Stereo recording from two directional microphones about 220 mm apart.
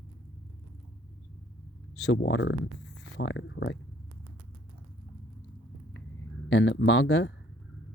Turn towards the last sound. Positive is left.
turn(degrees=55)  # may be behind; listen again after turning